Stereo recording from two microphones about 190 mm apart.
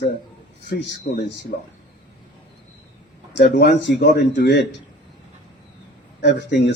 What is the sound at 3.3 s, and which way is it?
A man's voice, 65° left (ahead or behind).